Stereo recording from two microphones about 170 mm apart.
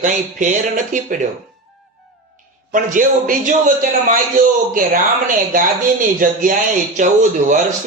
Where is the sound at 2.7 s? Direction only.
50° right (ahead or behind).